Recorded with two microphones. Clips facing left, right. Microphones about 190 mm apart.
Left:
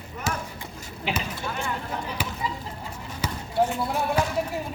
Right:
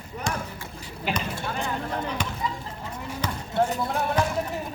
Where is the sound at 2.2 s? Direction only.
5° left (ahead or behind).